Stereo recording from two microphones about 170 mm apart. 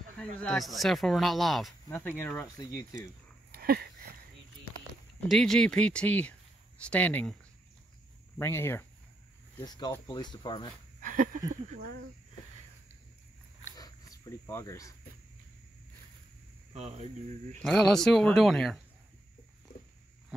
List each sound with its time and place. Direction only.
0.2 s speech: 5° left (ahead or behind)
2.0 s speech: 10° left (ahead or behind)
3.5 s a sound: 65° right (ahead or behind)
5.3 s speech: 5° left (ahead or behind)
8.4 s speech: 15° left (ahead or behind)
11.0 s a sound: 50° right (ahead or behind)
13.7 s a sound: 20° left (ahead or behind)
16.7 s speech: 40° right (ahead or behind)
17.6 s speech: 5° left (ahead or behind)